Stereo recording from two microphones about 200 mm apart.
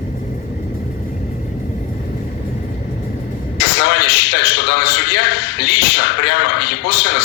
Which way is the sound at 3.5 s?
55° left (ahead or behind).